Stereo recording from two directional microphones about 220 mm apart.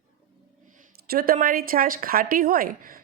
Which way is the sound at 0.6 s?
40° right (ahead or behind).